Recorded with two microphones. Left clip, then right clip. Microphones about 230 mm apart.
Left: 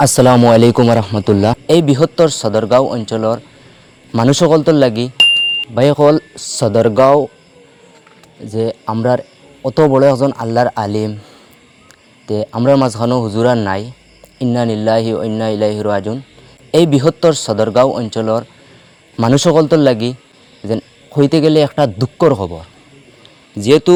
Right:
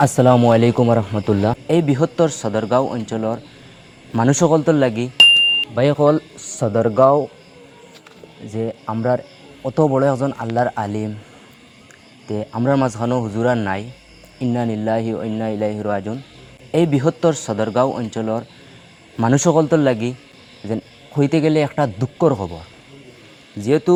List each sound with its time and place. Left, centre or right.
0.0 s a man's voice: left
5.1 s a sound: centre
5.7 s a man's voice: left
8.5 s a man's voice: left
9.9 s speech: left
12.3 s a man's voice: left
23.6 s a man's voice: left